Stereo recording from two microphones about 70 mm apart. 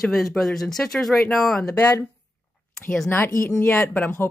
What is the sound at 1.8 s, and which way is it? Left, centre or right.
Speech, left.